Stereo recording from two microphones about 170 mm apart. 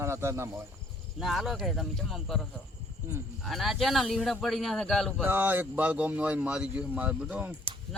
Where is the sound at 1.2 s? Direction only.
Centre (ahead or behind).